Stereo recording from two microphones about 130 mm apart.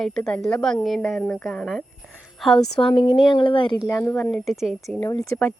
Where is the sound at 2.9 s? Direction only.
30° left (ahead or behind).